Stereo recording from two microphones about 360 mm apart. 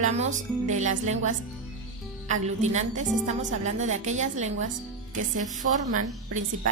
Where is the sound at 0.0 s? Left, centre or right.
Centre.